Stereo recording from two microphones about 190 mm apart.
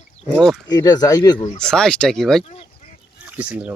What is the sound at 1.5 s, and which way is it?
Speech, 5° left (ahead or behind).